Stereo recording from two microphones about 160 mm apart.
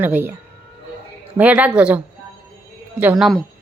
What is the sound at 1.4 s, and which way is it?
Speech, 10° right (ahead or behind).